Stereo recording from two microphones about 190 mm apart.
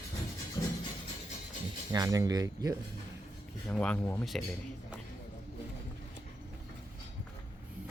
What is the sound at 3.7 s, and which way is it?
Speech, 5° left (ahead or behind).